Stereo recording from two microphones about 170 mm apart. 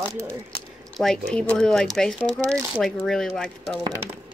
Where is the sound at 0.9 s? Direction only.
5° left (ahead or behind).